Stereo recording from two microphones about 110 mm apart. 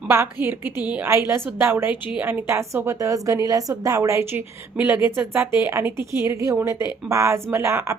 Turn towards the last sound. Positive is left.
turn(degrees=-25)  # may be behind; listen again after turning